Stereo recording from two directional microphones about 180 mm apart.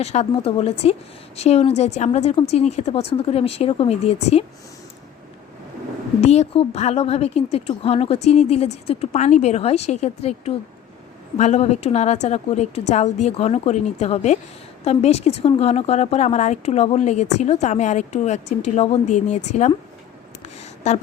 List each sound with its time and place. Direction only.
0.0 s a woman's voice: 35° left (ahead or behind)
6.2 s a woman's voice: 35° left (ahead or behind)
20.4 s a sound: 40° left (ahead or behind)